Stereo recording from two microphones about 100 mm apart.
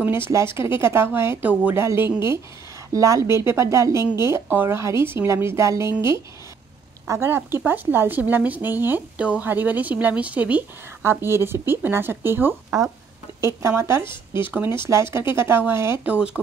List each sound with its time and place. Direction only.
0.0 s speech: 25° right (ahead or behind)